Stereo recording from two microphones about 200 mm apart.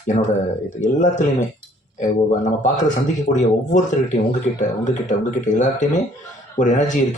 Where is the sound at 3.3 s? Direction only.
40° left (ahead or behind).